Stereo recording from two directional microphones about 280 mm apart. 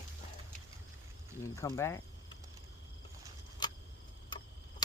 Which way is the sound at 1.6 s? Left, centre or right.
Centre.